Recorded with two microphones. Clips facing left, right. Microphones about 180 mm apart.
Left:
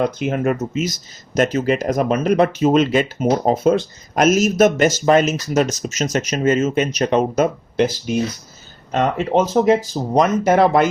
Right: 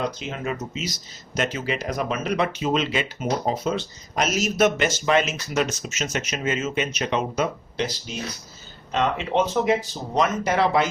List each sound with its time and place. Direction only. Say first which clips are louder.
0.0 s speech: left 9 dB; 55° left (ahead or behind)